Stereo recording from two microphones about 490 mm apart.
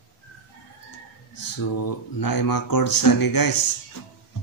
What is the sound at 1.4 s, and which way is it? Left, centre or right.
Speech, left.